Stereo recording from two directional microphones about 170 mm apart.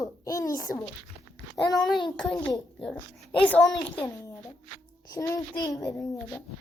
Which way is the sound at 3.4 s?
5° left (ahead or behind).